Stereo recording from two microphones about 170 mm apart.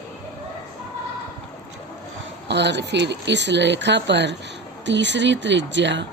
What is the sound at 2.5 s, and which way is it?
Speech, 90° right.